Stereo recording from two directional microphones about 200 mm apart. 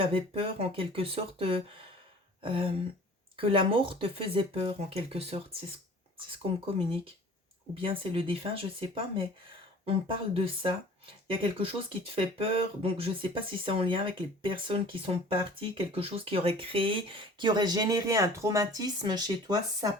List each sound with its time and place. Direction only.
0.0 s speech: 25° right (ahead or behind)
9.8 s speech: 25° right (ahead or behind)